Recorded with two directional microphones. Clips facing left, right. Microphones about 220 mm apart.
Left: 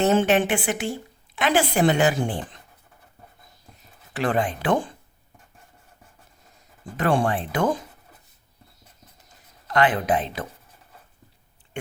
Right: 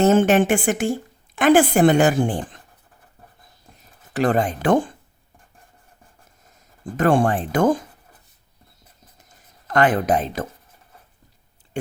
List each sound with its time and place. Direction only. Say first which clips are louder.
0.0 s a woman's voice: right 4 dB; 45° right (ahead or behind)
4.1 s a woman's voice: right 4 dB; 45° right (ahead or behind)
6.9 s a woman's voice: right 4 dB; 45° right (ahead or behind)
9.6 s a woman's voice: right 3 dB; 45° right (ahead or behind)